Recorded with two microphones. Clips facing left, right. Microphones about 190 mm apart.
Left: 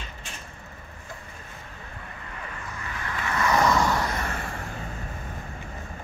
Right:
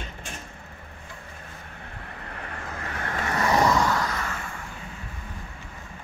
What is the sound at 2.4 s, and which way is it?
Vehicle, 55° right (ahead or behind).